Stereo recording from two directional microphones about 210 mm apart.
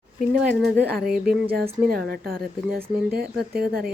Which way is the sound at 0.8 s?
50° right (ahead or behind).